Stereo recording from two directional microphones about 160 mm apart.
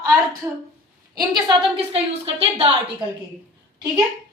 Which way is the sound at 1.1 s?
25° right (ahead or behind).